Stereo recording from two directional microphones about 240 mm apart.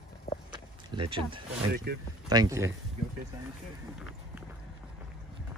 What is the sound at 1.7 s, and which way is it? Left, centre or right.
Speech, right.